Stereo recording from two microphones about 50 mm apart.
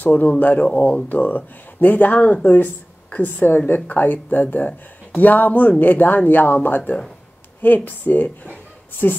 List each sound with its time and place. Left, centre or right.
0.0 s speech: left